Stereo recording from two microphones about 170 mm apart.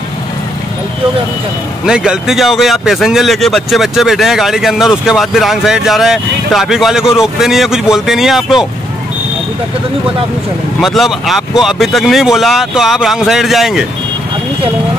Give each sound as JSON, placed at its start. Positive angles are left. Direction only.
{"t": 1.9, "sound": "speech", "side_deg": -5}
{"t": 10.8, "sound": "speech", "side_deg": 0}